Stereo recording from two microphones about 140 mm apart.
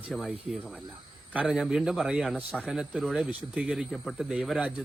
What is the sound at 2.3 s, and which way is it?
Speech, 10° left (ahead or behind).